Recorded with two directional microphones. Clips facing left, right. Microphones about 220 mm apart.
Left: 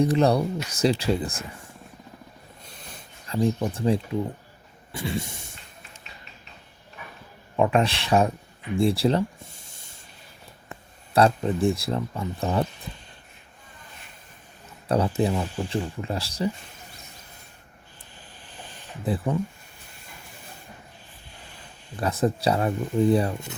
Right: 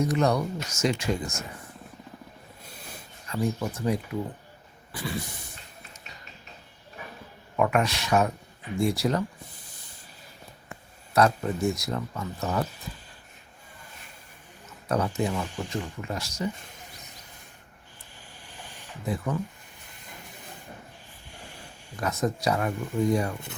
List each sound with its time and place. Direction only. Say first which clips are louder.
0.0 s speech: left 4 dB; 30° left (ahead or behind)
2.6 s a sound: right 1 dB; 5° right (ahead or behind)
3.2 s speech: left 4 dB; 30° left (ahead or behind)
7.5 s speech: left 3 dB; 25° left (ahead or behind)
11.1 s speech: left 3 dB; 30° left (ahead or behind)
14.8 s speech: left 4 dB; 30° left (ahead or behind)
18.4 s a sound: left 2 dB; 15° right (ahead or behind)
19.0 s speech: left 4 dB; 30° left (ahead or behind)
21.3 s a sound: right 3 dB; 15° right (ahead or behind)
21.9 s speech: left 4 dB; 30° left (ahead or behind)